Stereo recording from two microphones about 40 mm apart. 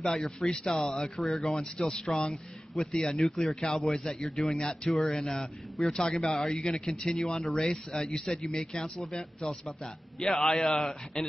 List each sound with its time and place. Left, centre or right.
0.0 s a man's voice: centre
4.6 s a man's voice: left
8.5 s a man's voice: left; by 11.2 s centre